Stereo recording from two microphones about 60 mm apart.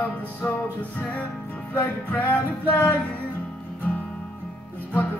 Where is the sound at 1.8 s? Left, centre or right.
Left.